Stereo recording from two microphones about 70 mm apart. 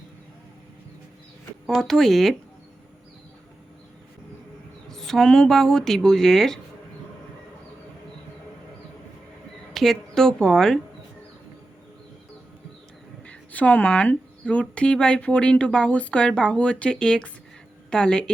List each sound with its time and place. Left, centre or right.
1.6 s speech: centre
4.9 s speech: centre
9.7 s a woman's voice: centre
13.2 s speech: left